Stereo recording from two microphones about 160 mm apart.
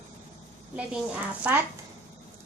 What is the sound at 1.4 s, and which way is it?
Speech, 10° right (ahead or behind).